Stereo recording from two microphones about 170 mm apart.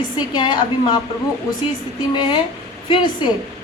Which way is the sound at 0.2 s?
25° left (ahead or behind).